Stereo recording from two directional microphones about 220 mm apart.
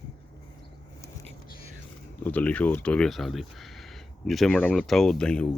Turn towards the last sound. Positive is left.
turn(degrees=5)  # may be behind; listen again after turning